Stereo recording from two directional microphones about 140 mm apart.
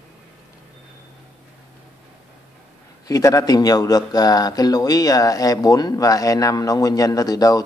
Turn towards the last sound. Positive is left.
turn(degrees=25)  # may be behind; listen again after turning